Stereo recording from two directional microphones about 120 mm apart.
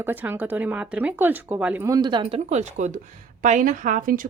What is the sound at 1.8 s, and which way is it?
Speech, 35° right (ahead or behind).